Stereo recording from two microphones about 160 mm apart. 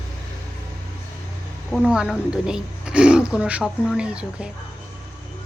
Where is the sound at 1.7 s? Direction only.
5° right (ahead or behind).